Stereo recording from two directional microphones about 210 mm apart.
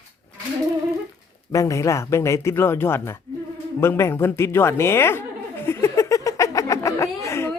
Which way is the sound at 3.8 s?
10° left (ahead or behind).